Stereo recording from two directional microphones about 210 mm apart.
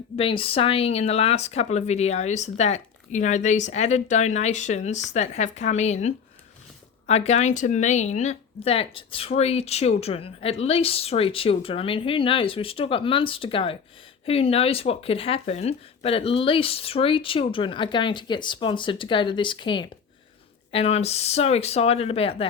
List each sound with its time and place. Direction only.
0.2 s speech: 25° left (ahead or behind)